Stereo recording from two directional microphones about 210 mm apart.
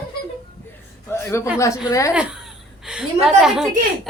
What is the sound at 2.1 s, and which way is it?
A child's voice, 5° right (ahead or behind).